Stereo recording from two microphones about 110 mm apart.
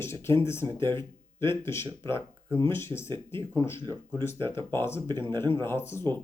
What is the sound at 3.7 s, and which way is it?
Speech, 45° right (ahead or behind).